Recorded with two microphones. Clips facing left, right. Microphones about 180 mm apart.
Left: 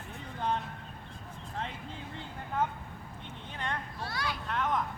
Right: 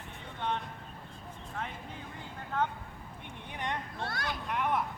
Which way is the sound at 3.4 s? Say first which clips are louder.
Right 1 dB; 15° right (ahead or behind).